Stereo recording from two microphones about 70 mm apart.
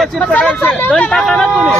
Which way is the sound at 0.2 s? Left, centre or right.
Centre.